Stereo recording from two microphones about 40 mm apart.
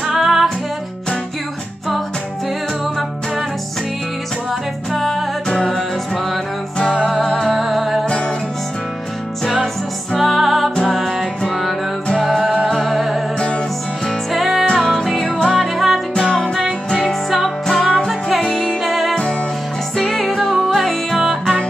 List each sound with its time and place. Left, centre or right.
0.0 s music: centre
4.9 s music: centre
5.5 s music: centre
6.8 s music: centre
7.4 s music: centre
10.1 s music: centre
10.8 s music: centre
12.2 s music: centre
14.3 s music: centre
14.7 s music: centre
15.2 s music: centre
15.5 s music: centre
18.9 s music: centre